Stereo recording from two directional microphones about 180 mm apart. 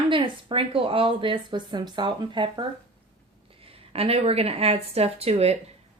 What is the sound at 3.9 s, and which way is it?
Speech, 35° right (ahead or behind).